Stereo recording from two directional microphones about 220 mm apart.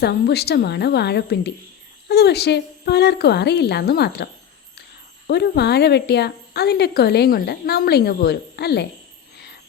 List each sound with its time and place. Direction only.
0.0 s speech: 45° left (ahead or behind)
5.3 s speech: 50° left (ahead or behind)